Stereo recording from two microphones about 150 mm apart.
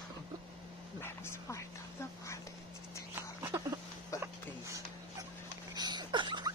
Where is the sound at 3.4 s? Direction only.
20° right (ahead or behind).